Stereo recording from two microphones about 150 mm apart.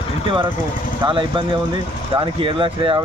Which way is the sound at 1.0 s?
35° right (ahead or behind).